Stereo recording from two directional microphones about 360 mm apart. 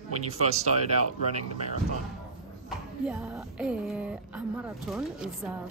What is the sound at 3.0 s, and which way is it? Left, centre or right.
A woman's voice, centre.